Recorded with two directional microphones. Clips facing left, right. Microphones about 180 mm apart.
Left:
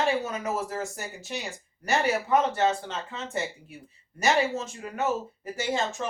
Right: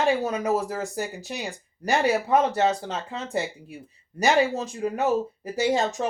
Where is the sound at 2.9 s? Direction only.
35° right (ahead or behind).